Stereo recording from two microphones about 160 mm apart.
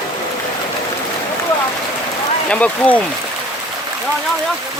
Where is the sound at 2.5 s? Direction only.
10° left (ahead or behind).